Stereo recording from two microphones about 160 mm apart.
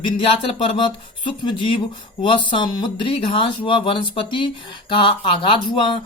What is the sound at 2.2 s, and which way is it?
Speech, 30° left (ahead or behind).